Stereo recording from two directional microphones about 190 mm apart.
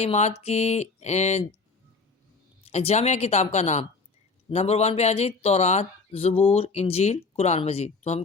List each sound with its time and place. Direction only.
0.0 s speech: 35° left (ahead or behind)
2.6 s speech: 35° left (ahead or behind)